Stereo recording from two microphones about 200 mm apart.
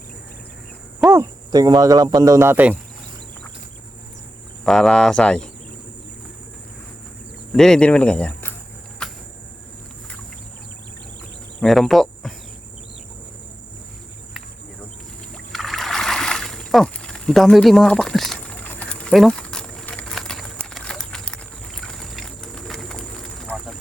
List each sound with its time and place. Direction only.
1.1 s speech: 15° right (ahead or behind)
4.6 s speech: centre (ahead or behind)
7.5 s speech: 5° left (ahead or behind)
9.0 s a sound: 5° left (ahead or behind)
11.6 s speech: centre (ahead or behind)
15.5 s a sound: centre (ahead or behind)